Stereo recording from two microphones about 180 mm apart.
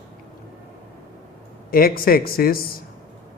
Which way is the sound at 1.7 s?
55° left (ahead or behind).